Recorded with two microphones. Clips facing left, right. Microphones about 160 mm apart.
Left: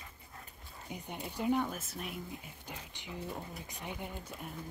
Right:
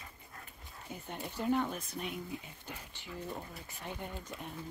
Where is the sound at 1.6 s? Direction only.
5° left (ahead or behind).